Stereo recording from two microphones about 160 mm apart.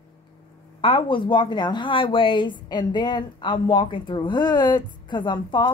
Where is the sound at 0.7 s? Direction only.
35° left (ahead or behind).